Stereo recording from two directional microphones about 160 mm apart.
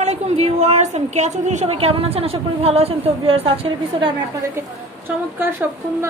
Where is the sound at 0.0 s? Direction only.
45° right (ahead or behind).